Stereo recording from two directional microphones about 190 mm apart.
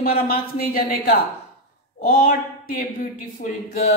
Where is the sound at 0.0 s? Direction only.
50° left (ahead or behind).